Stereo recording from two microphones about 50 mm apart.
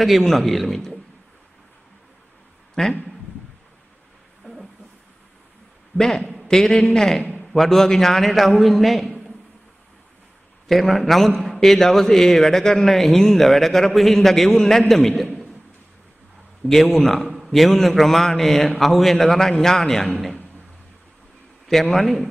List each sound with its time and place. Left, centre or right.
0.0 s a man's voice: centre
2.8 s a man's voice: centre
5.9 s a man's voice: centre
10.7 s a man's voice: centre
16.6 s a man's voice: centre
21.9 s a man's voice: centre